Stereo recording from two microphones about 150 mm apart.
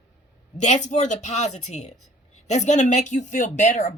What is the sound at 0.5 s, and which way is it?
Speech, 50° left (ahead or behind).